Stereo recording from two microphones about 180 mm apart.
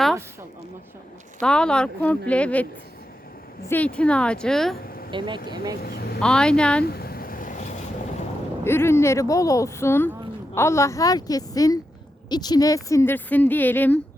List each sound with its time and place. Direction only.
1.4 s speech: 5° left (ahead or behind)
3.7 s a woman's voice: 10° left (ahead or behind)
5.1 s speech: 25° right (ahead or behind)
5.8 s speech: 60° left (ahead or behind)
6.1 s a woman's voice: 5° left (ahead or behind)
6.8 s vehicle: 60° left (ahead or behind)
8.6 s a woman's voice: 15° left (ahead or behind)